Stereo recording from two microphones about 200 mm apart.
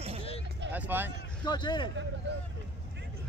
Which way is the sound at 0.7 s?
10° right (ahead or behind).